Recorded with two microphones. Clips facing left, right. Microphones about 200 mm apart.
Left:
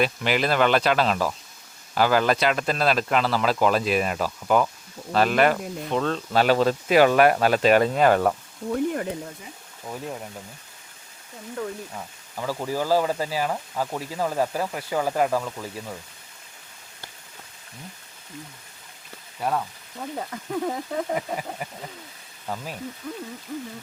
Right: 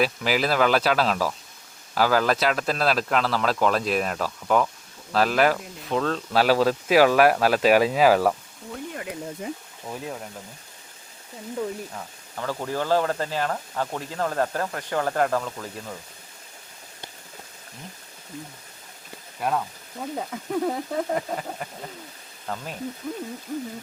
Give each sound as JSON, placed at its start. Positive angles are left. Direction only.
{"t": 0.0, "sound": "speech", "side_deg": 0}
{"t": 8.7, "sound": "frying", "side_deg": 55}
{"t": 9.8, "sound": "speech", "side_deg": 0}
{"t": 11.9, "sound": "speech", "side_deg": 5}
{"t": 19.4, "sound": "speech", "side_deg": 0}
{"t": 23.0, "sound": "a sound", "side_deg": -10}